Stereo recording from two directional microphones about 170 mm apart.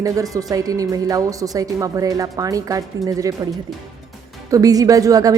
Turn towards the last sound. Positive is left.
turn(degrees=-20)  # may be behind; listen again after turning